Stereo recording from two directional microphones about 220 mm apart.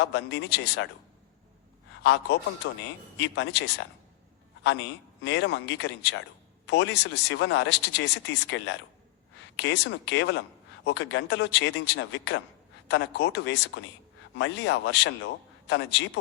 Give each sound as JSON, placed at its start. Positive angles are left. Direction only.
{"t": 0.0, "sound": "speech", "side_deg": 50}
{"t": 2.0, "sound": "speech", "side_deg": 50}